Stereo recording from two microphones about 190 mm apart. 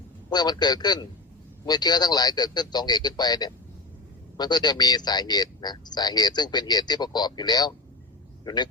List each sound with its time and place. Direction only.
0.3 s speech: 20° left (ahead or behind)